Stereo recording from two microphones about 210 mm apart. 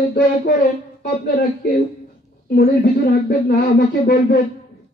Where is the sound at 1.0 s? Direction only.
45° left (ahead or behind).